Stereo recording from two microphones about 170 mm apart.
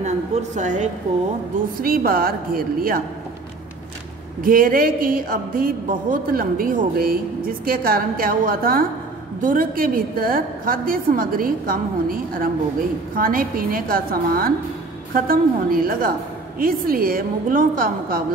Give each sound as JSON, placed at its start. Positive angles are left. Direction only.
{"t": 0.0, "sound": "speech", "side_deg": -45}
{"t": 1.8, "sound": "a woman's voice", "side_deg": -60}
{"t": 4.4, "sound": "a woman's voice", "side_deg": -55}